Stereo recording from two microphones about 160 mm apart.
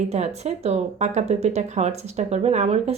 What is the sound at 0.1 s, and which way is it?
Speech, 45° right (ahead or behind).